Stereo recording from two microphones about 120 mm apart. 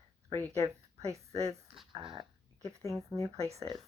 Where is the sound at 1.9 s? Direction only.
45° right (ahead or behind).